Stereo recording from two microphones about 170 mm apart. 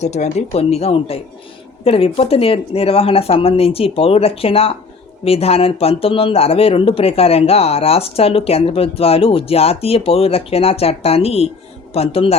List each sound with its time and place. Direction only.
0.0 s speech: 40° left (ahead or behind)